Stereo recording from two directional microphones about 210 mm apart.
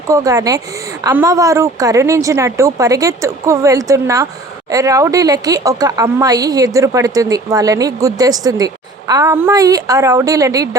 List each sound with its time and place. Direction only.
0.1 s a woman's voice: 15° right (ahead or behind)